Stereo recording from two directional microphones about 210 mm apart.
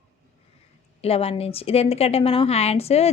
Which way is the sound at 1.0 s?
30° left (ahead or behind).